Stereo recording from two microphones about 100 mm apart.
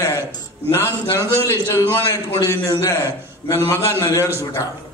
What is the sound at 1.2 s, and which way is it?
Speech, 25° right (ahead or behind).